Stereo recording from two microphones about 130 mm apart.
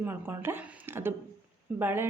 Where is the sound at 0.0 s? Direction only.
20° right (ahead or behind).